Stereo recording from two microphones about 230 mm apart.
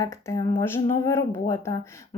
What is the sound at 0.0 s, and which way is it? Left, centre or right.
A woman's voice, centre.